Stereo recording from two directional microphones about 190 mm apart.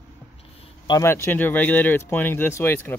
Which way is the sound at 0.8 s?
20° left (ahead or behind).